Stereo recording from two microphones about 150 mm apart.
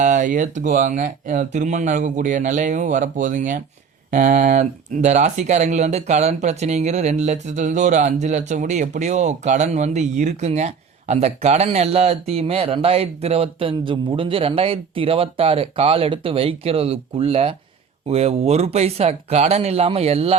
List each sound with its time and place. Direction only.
0.0 s speech: 60° right (ahead or behind); by 20.3 s 40° right (ahead or behind)